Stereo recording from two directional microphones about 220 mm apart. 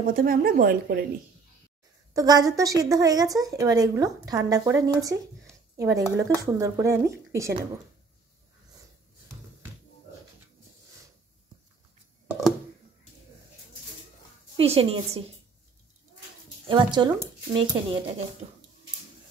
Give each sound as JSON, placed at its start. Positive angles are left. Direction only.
{"t": 0.0, "sound": "speech", "side_deg": -40}
{"t": 2.1, "sound": "a woman's voice", "side_deg": -15}
{"t": 14.6, "sound": "speech", "side_deg": -25}
{"t": 16.6, "sound": "speech", "side_deg": -20}